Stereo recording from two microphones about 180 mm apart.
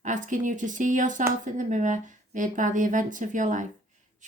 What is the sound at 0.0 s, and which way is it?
Speech, 45° right (ahead or behind).